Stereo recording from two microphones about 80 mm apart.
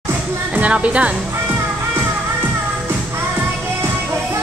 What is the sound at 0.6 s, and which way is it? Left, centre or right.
Speech, centre.